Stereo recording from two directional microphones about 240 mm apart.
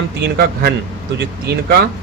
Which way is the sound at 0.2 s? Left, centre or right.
Right.